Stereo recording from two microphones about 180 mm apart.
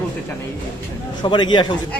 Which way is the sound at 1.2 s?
25° left (ahead or behind).